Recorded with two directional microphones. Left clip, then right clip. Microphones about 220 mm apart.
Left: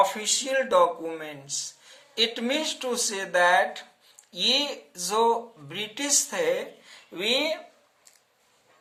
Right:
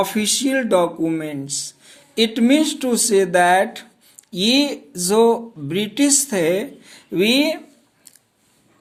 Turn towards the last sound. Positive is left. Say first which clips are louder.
# right 8 dB
turn(degrees=-45)  # may be behind; listen again after turning